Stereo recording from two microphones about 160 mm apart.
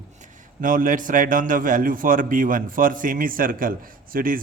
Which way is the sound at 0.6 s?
55° right (ahead or behind).